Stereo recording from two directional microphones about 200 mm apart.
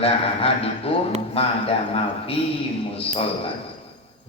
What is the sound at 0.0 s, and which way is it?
A man's voice, 30° left (ahead or behind).